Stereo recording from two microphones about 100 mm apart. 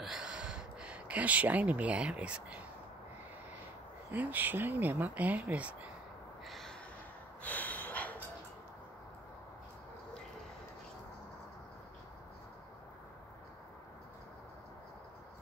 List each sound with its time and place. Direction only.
0.0 s a sound: 5° right (ahead or behind)
4.1 s speech: 15° right (ahead or behind)
6.4 s gasp: 5° left (ahead or behind)
7.4 s snort: 15° left (ahead or behind)